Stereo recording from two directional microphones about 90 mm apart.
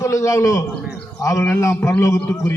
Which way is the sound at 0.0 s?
40° left (ahead or behind).